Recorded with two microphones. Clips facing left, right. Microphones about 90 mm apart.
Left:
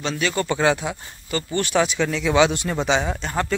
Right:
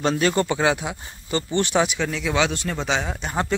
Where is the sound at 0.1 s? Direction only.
30° right (ahead or behind).